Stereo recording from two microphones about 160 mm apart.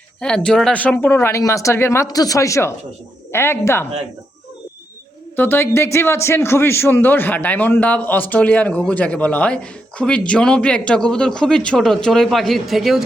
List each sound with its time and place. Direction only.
0.2 s a man's voice: 5° left (ahead or behind)
5.4 s a man's voice: 15° left (ahead or behind); by 13.1 s centre (ahead or behind)